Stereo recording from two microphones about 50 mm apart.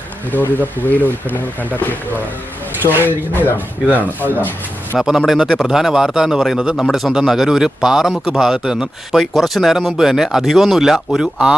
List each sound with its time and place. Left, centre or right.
0.3 s speech: left
5.0 s a man's voice: centre
9.3 s speech: centre
11.2 s a man's voice: centre